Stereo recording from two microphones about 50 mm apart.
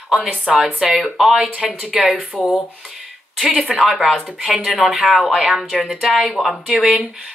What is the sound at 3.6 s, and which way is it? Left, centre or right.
Speech, centre.